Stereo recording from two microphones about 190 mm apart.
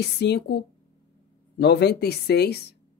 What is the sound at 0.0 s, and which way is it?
Speech, 60° left (ahead or behind).